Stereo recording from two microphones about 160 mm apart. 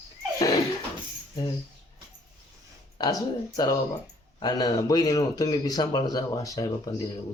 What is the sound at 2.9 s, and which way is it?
Speech, 25° left (ahead or behind).